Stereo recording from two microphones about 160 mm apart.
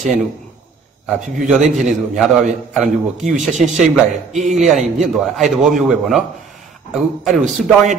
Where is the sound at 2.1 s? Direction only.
Centre (ahead or behind).